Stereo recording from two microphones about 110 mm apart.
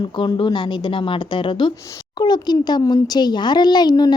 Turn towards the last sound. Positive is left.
turn(degrees=40)  # may be behind; listen again after turning